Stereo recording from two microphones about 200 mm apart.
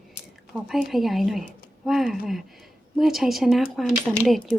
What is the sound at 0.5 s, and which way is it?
Speech, centre (ahead or behind).